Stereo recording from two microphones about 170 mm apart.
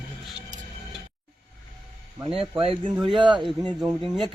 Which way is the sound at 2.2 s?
30° right (ahead or behind).